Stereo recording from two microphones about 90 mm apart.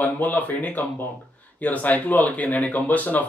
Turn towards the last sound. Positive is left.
turn(degrees=15)  # may be behind; listen again after turning